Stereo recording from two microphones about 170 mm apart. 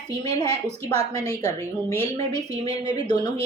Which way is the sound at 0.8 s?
35° right (ahead or behind).